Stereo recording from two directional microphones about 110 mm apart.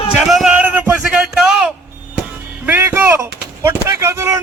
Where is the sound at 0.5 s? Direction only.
15° right (ahead or behind).